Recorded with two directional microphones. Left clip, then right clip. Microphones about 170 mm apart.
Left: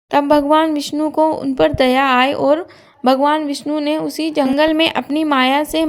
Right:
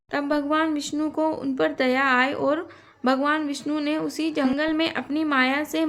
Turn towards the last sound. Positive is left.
turn(degrees=35)  # may be behind; listen again after turning